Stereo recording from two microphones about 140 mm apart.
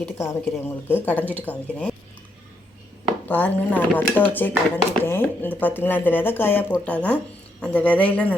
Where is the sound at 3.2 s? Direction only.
10° left (ahead or behind).